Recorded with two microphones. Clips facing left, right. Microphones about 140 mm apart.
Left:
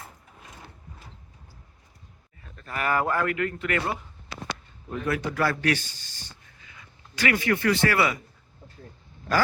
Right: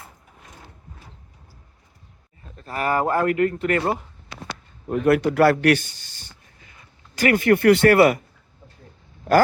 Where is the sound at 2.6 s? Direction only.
35° right (ahead or behind).